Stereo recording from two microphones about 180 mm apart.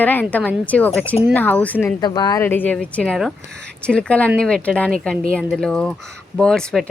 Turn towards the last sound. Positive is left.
turn(degrees=5)  # may be behind; listen again after turning